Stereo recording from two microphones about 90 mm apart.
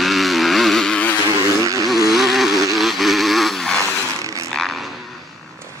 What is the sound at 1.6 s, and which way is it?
Vehicle, 40° right (ahead or behind).